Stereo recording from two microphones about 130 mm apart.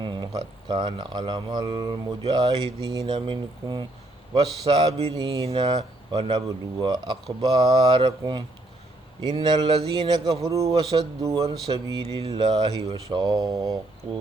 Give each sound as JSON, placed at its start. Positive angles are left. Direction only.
{"t": 0.0, "sound": "a man's voice", "side_deg": -35}
{"t": 4.4, "sound": "a man's voice", "side_deg": -35}
{"t": 4.9, "sound": "mantra", "side_deg": -50}
{"t": 5.1, "sound": "a man's voice", "side_deg": -35}
{"t": 6.1, "sound": "mantra", "side_deg": -45}
{"t": 6.7, "sound": "a man's voice", "side_deg": -35}